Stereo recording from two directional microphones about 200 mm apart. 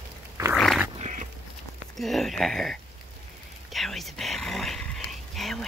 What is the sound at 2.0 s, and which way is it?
Speech, centre (ahead or behind).